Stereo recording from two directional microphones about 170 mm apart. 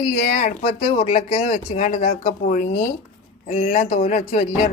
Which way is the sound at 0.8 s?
40° left (ahead or behind).